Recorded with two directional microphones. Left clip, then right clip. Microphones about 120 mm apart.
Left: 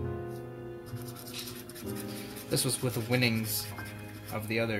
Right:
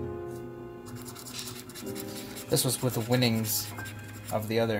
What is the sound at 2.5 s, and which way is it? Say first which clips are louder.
Speech: right 3 dB; 55° right (ahead or behind).